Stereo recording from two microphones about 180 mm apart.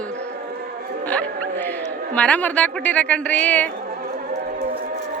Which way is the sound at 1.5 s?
10° left (ahead or behind).